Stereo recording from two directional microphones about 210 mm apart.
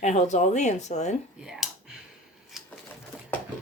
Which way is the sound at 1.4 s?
Centre (ahead or behind).